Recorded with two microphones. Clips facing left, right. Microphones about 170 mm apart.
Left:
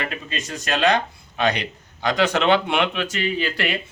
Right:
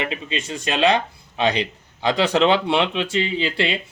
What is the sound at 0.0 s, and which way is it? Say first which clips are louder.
A man's voice: right 3 dB; 25° right (ahead or behind).